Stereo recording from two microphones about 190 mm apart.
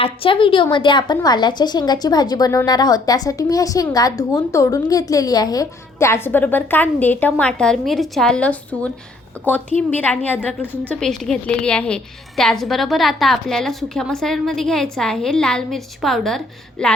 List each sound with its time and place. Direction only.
0.0 s a woman's voice: 30° left (ahead or behind); by 16.9 s 5° left (ahead or behind)